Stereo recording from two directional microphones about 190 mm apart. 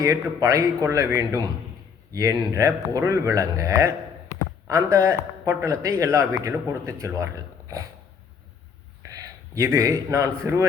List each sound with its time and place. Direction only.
0.0 s a man's voice: 20° right (ahead or behind)
9.6 s a man's voice: 15° right (ahead or behind)